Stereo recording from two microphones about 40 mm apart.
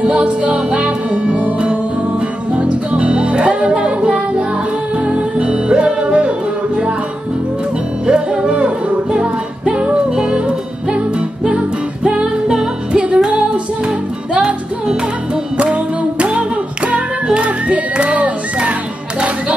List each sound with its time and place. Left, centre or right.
0.0 s music: right
8.1 s music: right
15.5 s music: right